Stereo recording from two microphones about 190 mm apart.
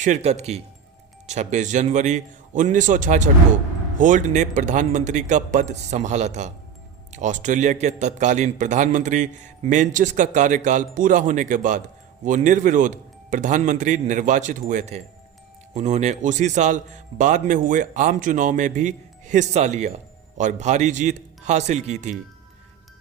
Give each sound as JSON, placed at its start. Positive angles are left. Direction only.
{"t": 0.0, "sound": "a man's voice", "side_deg": -35}